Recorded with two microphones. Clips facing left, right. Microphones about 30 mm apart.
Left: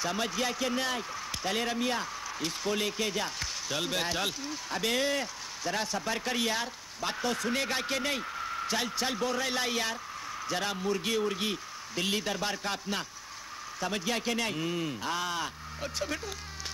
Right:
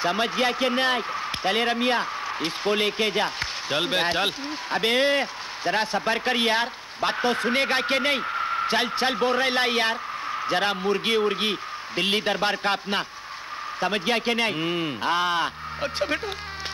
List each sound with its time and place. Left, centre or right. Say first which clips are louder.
0.0 s a man's voice: right 8 dB; right